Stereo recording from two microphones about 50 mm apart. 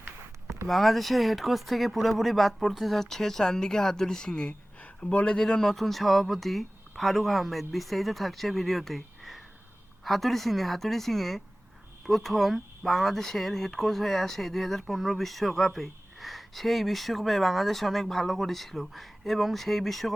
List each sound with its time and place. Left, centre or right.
0.7 s speech: centre; by 5.4 s left
5.4 s speech: centre